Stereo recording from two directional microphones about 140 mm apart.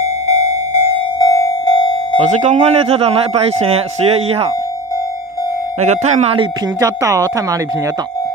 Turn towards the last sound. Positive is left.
turn(degrees=-25)  # may be behind; listen again after turning